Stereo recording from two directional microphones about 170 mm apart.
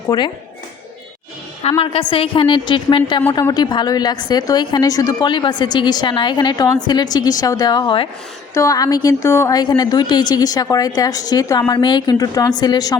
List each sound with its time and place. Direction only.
0.1 s a woman's voice: 20° left (ahead or behind)
1.8 s a woman's voice: 30° left (ahead or behind)